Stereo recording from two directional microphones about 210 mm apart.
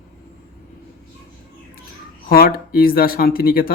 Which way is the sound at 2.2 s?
45° left (ahead or behind).